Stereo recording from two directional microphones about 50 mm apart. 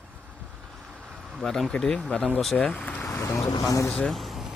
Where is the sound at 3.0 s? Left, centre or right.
Left.